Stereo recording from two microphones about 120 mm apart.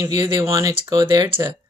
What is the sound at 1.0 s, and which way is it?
Speech, 40° right (ahead or behind).